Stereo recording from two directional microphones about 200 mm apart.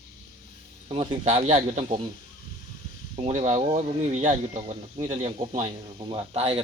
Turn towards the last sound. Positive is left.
turn(degrees=-25)  # may be behind; listen again after turning